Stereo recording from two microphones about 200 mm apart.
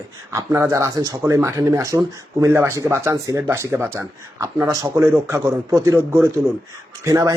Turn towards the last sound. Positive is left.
turn(degrees=-15)  # may be behind; listen again after turning